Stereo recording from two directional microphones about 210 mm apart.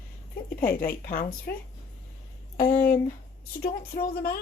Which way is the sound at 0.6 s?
45° left (ahead or behind).